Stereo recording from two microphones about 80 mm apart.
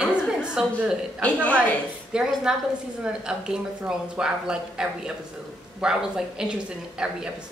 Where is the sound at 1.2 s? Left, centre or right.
Centre.